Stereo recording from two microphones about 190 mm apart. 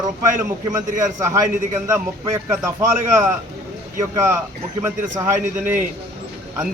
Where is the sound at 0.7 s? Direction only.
10° right (ahead or behind).